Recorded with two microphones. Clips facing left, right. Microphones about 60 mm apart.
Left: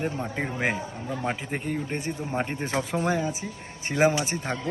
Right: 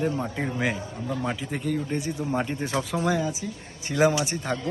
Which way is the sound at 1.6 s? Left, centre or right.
Left.